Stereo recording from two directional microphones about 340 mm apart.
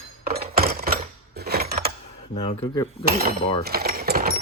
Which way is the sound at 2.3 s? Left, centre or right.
Centre.